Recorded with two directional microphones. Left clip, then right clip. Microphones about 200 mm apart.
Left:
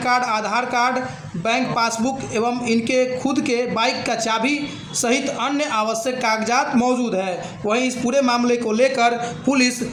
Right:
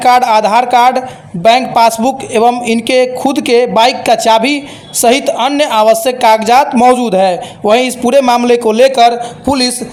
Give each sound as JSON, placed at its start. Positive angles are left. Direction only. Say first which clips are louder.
{"t": 0.0, "sound": "a woman's voice", "louder": "right 12 dB", "side_deg": -40}